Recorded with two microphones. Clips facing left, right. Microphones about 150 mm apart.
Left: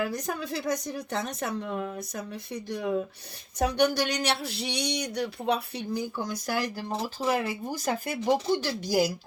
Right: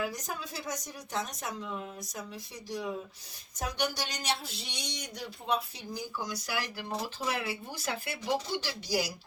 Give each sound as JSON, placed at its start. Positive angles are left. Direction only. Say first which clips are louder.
{"t": 0.0, "sound": "speech", "louder": "left 5 dB", "side_deg": 65}
{"t": 6.4, "sound": "speech", "louder": "left 6 dB", "side_deg": 45}